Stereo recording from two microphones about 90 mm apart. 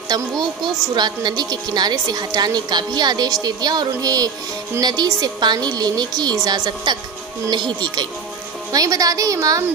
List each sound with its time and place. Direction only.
0.1 s a woman's voice: 50° right (ahead or behind)
8.7 s a woman's voice: 40° right (ahead or behind)